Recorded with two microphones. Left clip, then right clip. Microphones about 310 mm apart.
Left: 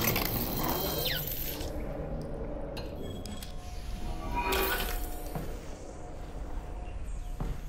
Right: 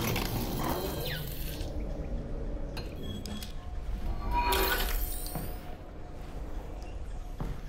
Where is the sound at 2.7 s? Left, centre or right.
Centre.